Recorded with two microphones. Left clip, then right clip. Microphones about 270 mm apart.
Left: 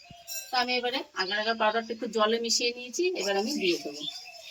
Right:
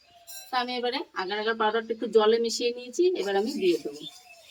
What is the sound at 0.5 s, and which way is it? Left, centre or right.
A woman's voice, centre.